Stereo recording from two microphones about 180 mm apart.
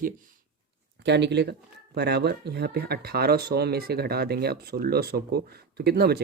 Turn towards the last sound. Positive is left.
turn(degrees=-65)  # may be behind; listen again after turning